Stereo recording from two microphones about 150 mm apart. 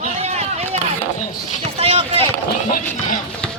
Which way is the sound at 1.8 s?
40° right (ahead or behind).